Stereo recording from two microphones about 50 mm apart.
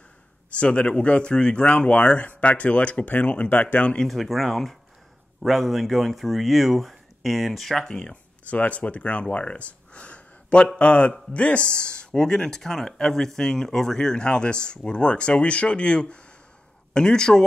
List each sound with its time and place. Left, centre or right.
0.6 s speech: left
3.8 s speech: left
4.1 s speech: centre
7.9 s speech: left
9.3 s a sound: left
10.8 s speech: left